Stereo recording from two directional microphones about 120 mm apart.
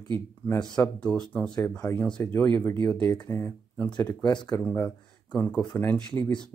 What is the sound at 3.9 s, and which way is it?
Speech, 35° left (ahead or behind).